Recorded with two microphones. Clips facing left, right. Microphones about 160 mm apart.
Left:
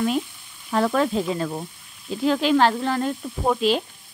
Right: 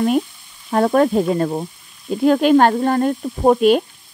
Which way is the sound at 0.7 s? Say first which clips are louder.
Right 6 dB; 45° right (ahead or behind).